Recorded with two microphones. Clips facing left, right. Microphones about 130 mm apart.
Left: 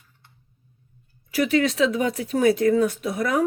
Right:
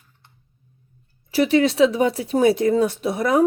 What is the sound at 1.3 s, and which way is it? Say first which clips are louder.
Speech: right 4 dB; 25° right (ahead or behind).